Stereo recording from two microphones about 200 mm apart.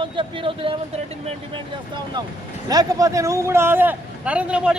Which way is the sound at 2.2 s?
20° right (ahead or behind).